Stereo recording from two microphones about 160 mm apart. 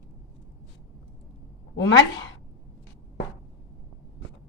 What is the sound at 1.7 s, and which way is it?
Speech, 90° left.